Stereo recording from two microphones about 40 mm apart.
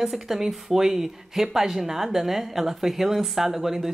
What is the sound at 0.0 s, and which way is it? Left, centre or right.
A woman's voice, centre.